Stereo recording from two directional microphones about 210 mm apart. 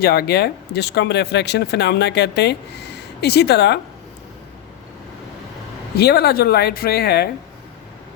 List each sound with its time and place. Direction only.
0.0 s speech: 50° left (ahead or behind)
6.0 s speech: 50° left (ahead or behind)